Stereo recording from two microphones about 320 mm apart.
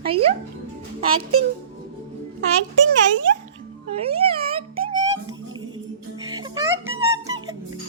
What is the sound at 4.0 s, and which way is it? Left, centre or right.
Speech, centre.